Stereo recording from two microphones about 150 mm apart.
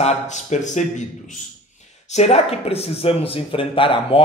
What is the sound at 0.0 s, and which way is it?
Speech, 50° left (ahead or behind).